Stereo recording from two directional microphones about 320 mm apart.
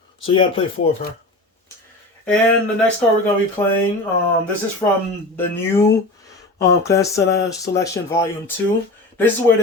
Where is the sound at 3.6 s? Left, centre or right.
Centre.